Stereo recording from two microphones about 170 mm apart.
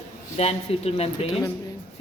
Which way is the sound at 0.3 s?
35° left (ahead or behind).